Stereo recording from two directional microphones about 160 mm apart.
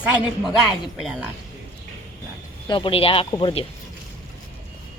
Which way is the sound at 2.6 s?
30° left (ahead or behind).